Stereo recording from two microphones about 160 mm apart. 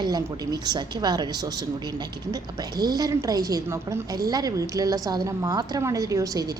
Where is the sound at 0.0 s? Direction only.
25° right (ahead or behind).